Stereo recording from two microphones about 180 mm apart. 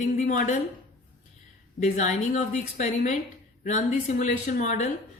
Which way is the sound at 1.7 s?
40° left (ahead or behind).